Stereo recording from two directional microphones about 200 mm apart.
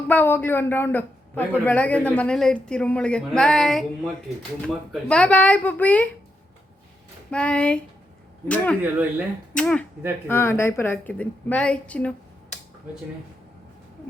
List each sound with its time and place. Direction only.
0.1 s a woman's voice: 10° left (ahead or behind)
7.3 s a woman's voice: 5° left (ahead or behind)
8.8 s speech: 10° right (ahead or behind)
9.6 s a woman's voice: 5° left (ahead or behind)